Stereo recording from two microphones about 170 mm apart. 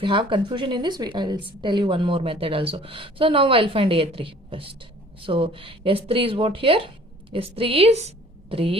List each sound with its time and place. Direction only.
0.0 s a woman's voice: 30° right (ahead or behind)